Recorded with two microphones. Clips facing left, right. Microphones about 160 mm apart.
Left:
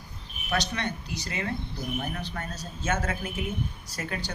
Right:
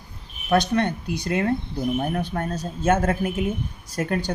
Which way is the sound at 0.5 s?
55° right (ahead or behind).